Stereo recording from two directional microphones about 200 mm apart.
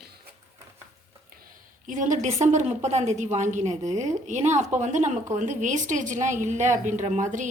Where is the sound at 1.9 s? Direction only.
40° right (ahead or behind).